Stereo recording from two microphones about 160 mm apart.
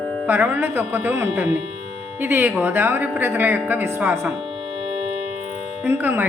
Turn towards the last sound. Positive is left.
turn(degrees=-10)  # may be behind; listen again after turning